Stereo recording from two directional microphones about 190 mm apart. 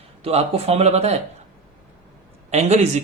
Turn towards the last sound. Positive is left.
turn(degrees=-35)  # may be behind; listen again after turning